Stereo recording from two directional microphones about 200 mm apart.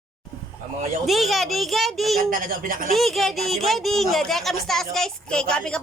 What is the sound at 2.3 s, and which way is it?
Speech, 45° right (ahead or behind).